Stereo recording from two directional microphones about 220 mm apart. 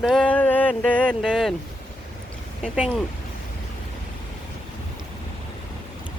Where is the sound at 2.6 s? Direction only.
5° right (ahead or behind).